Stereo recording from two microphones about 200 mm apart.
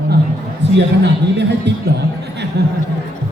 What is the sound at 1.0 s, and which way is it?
Speech, 60° right (ahead or behind).